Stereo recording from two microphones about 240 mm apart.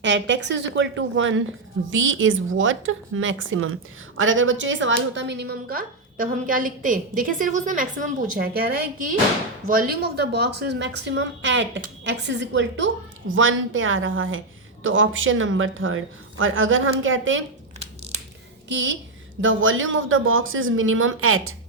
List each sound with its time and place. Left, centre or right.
0.0 s a woman's voice: right
18.7 s a woman's voice: right